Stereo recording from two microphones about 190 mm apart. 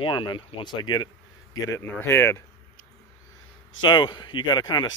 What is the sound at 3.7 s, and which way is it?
Speech, 25° left (ahead or behind).